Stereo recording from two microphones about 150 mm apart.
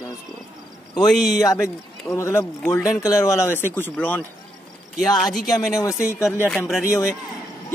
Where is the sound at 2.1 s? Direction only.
15° left (ahead or behind).